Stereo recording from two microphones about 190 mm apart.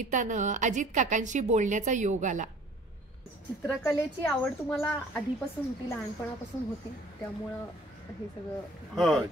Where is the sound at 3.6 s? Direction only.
15° left (ahead or behind).